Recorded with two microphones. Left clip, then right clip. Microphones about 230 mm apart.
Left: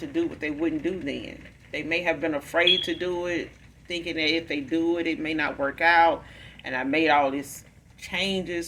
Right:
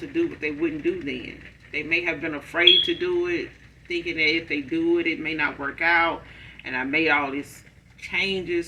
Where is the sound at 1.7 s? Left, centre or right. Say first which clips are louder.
Right 1 dB; left.